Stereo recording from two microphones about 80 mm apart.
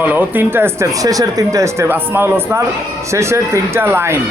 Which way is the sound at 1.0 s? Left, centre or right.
Right.